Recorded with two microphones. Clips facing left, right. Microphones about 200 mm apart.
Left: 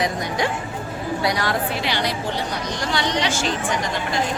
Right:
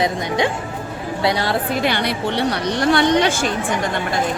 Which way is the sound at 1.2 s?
25° right (ahead or behind).